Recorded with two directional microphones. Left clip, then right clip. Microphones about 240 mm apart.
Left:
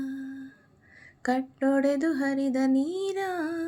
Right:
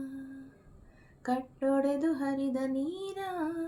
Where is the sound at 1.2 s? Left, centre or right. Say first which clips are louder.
Left 5 dB; left.